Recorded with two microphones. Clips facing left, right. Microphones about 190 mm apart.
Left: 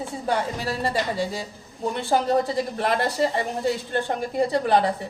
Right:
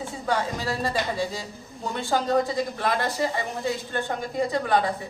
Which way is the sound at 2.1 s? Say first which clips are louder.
Left 1 dB; 30° left (ahead or behind).